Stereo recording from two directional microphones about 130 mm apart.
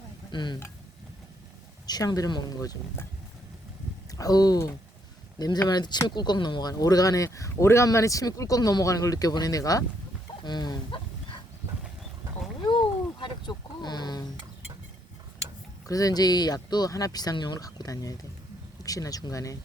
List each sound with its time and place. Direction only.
0.3 s speech: 35° left (ahead or behind)
1.9 s speech: 30° left (ahead or behind)
4.1 s speech: 30° left (ahead or behind)
10.4 s livestock: 35° left (ahead or behind)
12.6 s a sound: 40° left (ahead or behind)
15.9 s speech: 25° left (ahead or behind)